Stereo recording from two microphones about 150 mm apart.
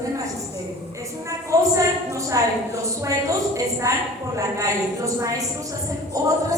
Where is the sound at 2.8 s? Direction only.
20° right (ahead or behind).